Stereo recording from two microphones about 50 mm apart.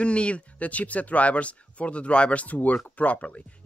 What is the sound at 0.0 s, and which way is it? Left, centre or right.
Speech, left.